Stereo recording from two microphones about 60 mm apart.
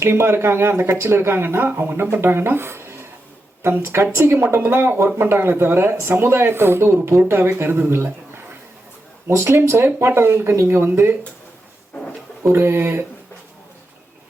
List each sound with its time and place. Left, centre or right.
0.0 s speech: right
12.5 s speech: right